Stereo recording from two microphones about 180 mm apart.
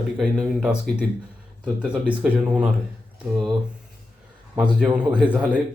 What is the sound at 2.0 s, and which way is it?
Speech, 5° right (ahead or behind).